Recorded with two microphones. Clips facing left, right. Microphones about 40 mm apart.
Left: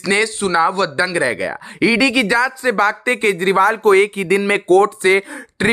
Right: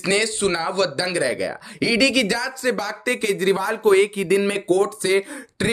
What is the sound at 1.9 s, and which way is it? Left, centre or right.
Speech, centre.